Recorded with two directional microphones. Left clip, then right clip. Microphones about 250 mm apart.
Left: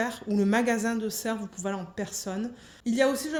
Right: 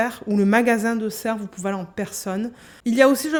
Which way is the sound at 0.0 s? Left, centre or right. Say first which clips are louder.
Right 6 dB; right.